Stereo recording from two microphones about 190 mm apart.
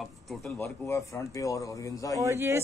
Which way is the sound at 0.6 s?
15° left (ahead or behind).